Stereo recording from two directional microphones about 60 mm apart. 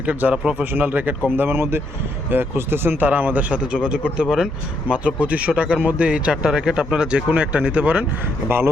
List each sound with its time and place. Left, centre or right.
0.0 s speech: right; by 4.4 s centre
4.9 s speech: right
8.4 s speech: right